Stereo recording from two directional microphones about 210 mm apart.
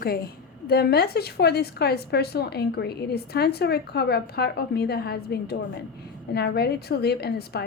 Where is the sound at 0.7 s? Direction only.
50° left (ahead or behind).